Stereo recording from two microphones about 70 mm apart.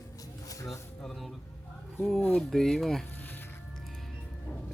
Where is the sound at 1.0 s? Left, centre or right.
Centre.